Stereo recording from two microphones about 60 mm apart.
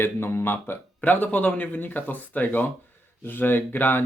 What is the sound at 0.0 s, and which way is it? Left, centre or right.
Speech, left.